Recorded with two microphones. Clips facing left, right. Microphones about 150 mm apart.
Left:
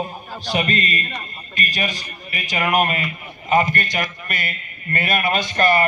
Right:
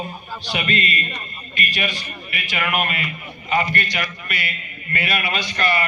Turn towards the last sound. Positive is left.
turn(degrees=45)  # may be behind; listen again after turning